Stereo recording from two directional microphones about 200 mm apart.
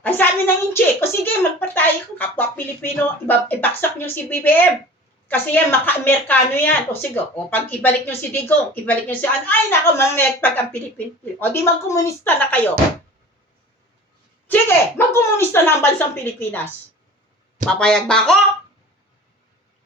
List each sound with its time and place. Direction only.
0.0 s speech: 10° left (ahead or behind)
14.4 s speech: 10° left (ahead or behind)